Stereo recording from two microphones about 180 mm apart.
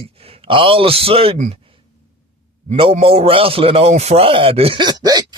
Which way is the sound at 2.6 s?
35° right (ahead or behind).